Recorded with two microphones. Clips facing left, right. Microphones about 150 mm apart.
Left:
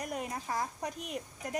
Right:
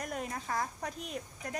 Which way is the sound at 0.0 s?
15° left (ahead or behind).